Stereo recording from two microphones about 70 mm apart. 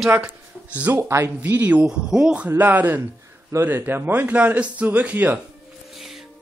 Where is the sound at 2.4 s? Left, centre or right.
Right.